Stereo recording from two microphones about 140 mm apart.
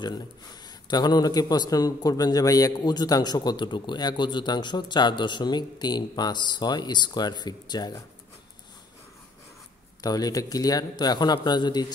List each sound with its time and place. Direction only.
0.8 s a man's voice: 30° left (ahead or behind)
10.0 s a man's voice: 25° left (ahead or behind)